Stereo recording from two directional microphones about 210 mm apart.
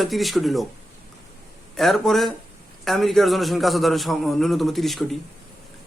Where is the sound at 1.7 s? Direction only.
Centre (ahead or behind).